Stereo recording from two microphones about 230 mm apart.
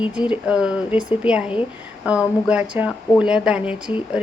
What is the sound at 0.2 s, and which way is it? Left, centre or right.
A woman's voice, centre.